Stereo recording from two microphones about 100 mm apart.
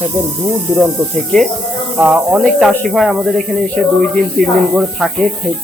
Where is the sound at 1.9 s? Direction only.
15° right (ahead or behind).